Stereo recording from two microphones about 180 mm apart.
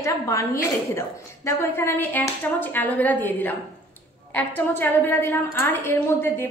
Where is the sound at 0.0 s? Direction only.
15° left (ahead or behind).